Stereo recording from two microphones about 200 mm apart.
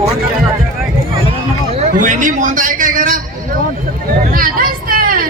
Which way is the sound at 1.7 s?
40° right (ahead or behind).